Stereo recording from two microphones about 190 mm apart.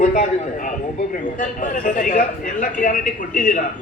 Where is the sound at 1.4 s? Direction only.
45° left (ahead or behind).